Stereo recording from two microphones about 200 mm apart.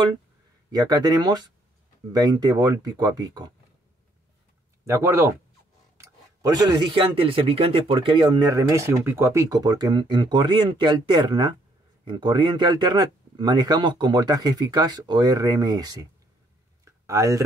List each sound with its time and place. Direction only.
0.7 s speech: 20° right (ahead or behind)
4.8 s speech: 15° right (ahead or behind)
16.8 s a sound: 15° right (ahead or behind)